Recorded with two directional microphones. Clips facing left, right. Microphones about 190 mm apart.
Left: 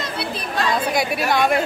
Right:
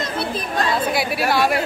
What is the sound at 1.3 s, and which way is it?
Speech, 5° right (ahead or behind).